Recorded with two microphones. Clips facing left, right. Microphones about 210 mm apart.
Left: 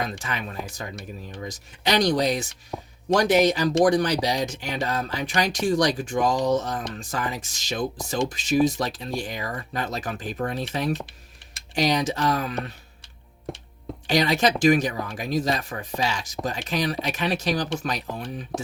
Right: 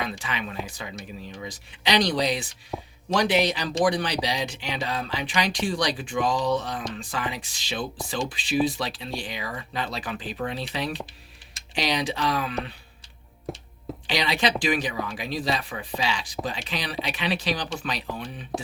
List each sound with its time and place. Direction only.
0.0 s speech: 45° left (ahead or behind)
2.7 s speech: centre (ahead or behind)
3.2 s speech: 45° left (ahead or behind)
13.5 s speech: centre (ahead or behind)
14.1 s speech: 45° left (ahead or behind)